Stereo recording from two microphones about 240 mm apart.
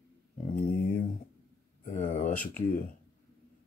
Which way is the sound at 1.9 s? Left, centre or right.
Left.